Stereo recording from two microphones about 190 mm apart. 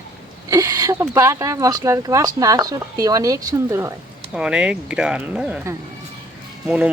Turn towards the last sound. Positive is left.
turn(degrees=-5)  # may be behind; listen again after turning